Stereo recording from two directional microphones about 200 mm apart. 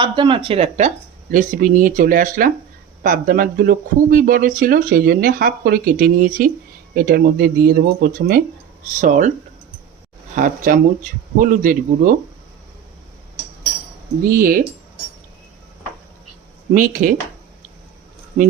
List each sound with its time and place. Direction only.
0.0 s speech: 25° right (ahead or behind)
10.3 s speech: 40° right (ahead or behind)
14.3 s speech: 45° right (ahead or behind)
16.7 s speech: 40° right (ahead or behind)